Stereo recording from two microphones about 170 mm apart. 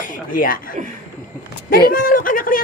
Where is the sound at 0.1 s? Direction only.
55° left (ahead or behind).